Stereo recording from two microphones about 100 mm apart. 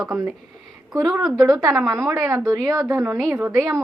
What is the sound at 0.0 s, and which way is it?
A woman's voice, 35° right (ahead or behind).